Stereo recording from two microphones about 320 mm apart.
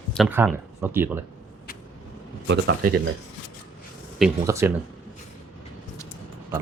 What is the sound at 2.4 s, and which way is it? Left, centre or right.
Speech, right.